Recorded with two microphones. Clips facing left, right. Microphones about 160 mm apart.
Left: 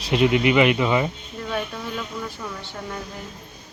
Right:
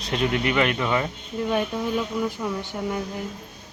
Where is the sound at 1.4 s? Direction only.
15° right (ahead or behind).